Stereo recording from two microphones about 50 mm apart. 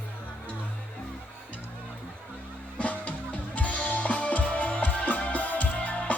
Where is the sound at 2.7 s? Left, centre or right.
Left.